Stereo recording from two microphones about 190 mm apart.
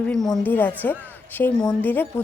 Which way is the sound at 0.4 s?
10° left (ahead or behind).